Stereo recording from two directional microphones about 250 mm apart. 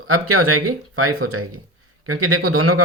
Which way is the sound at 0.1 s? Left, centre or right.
Right.